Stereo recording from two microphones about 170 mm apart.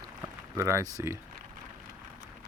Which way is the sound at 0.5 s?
20° right (ahead or behind).